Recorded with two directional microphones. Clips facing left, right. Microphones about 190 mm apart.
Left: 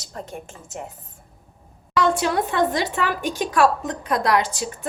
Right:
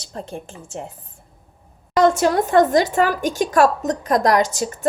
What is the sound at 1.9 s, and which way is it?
Speech, 45° right (ahead or behind).